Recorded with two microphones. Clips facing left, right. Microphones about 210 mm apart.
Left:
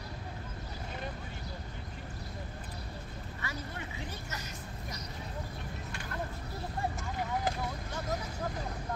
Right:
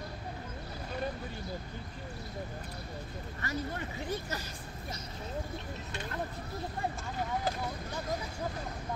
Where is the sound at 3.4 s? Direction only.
45° right (ahead or behind).